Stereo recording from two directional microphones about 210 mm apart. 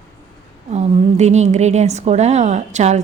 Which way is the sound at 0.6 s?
30° right (ahead or behind).